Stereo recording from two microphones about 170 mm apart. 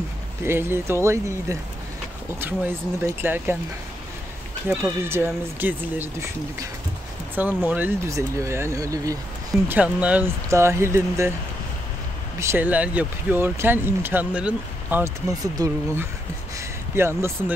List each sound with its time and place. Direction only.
0.4 s speech: 15° right (ahead or behind)
4.6 s speech: 15° right (ahead or behind)
9.7 s speech: 10° right (ahead or behind)
12.4 s speech: 15° right (ahead or behind)
15.2 s speech: 20° right (ahead or behind)
16.5 s a sound: 15° right (ahead or behind)